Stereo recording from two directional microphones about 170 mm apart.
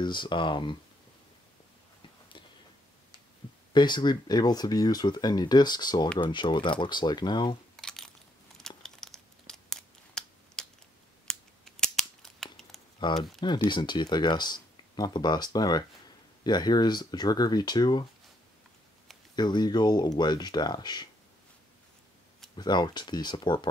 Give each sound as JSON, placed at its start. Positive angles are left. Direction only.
{"t": 0.0, "sound": "speech", "side_deg": 30}
{"t": 3.7, "sound": "speech", "side_deg": 25}
{"t": 7.7, "sound": "crumpling", "side_deg": 0}
{"t": 11.2, "sound": "scissors", "side_deg": 5}
{"t": 13.0, "sound": "speech", "side_deg": 25}
{"t": 19.3, "sound": "speech", "side_deg": 25}
{"t": 22.6, "sound": "speech", "side_deg": 25}